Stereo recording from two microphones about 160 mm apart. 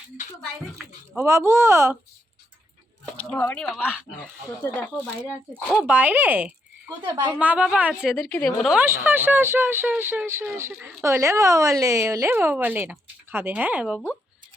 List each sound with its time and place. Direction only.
1.1 s speech: 15° right (ahead or behind)
3.3 s speech: 10° left (ahead or behind)
3.8 s a woman's voice: 5° right (ahead or behind)
5.6 s speech: 10° right (ahead or behind)
7.0 s a woman's voice: 25° right (ahead or behind)
7.3 s speech: 10° right (ahead or behind)
8.1 s a woman's voice: 5° left (ahead or behind)
8.8 s speech: 10° right (ahead or behind)